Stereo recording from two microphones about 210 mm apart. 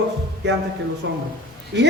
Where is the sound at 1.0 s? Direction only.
60° right (ahead or behind).